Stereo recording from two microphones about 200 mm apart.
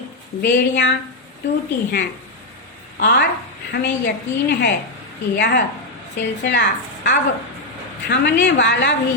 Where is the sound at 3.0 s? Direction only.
55° left (ahead or behind).